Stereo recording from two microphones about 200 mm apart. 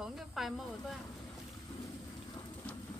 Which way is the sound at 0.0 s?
Centre (ahead or behind).